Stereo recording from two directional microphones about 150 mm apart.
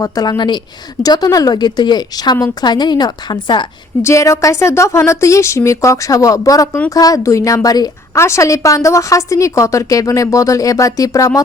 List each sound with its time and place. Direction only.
0.0 s a woman's voice: 25° left (ahead or behind)
4.0 s a woman's voice: 20° left (ahead or behind)